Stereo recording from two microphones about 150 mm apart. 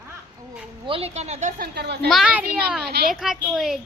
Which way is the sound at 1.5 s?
90° right.